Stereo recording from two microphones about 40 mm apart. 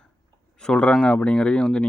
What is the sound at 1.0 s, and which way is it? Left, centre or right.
Speech, left.